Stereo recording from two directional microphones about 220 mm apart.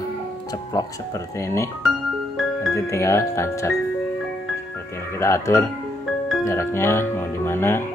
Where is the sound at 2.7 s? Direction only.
15° left (ahead or behind).